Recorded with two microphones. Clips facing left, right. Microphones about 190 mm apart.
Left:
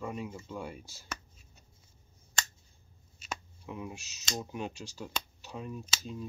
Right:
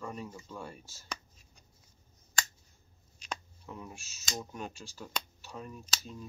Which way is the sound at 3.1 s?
5° left (ahead or behind).